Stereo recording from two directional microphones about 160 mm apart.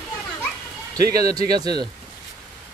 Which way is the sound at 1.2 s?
25° right (ahead or behind).